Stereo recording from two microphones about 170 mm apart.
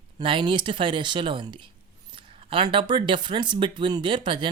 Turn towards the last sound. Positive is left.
turn(degrees=-30)  # may be behind; listen again after turning